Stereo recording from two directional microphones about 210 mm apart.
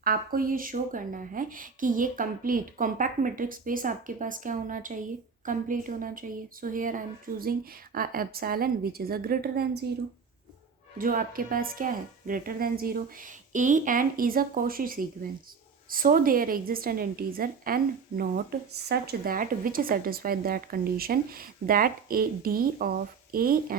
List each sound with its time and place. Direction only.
0.0 s a woman's voice: 45° right (ahead or behind)
10.9 s a woman's voice: 40° right (ahead or behind)